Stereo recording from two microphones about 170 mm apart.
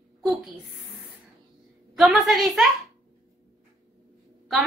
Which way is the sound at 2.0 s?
Centre (ahead or behind).